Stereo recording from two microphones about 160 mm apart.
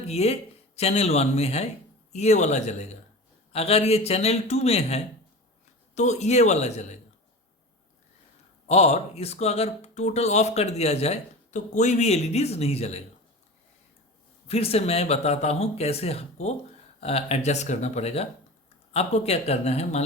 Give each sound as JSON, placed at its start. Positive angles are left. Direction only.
{"t": 0.1, "sound": "speech", "side_deg": 40}
{"t": 8.6, "sound": "speech", "side_deg": 40}
{"t": 14.4, "sound": "speech", "side_deg": 40}